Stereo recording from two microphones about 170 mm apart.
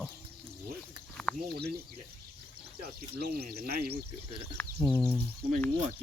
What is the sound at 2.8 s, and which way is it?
Speech, 65° right (ahead or behind).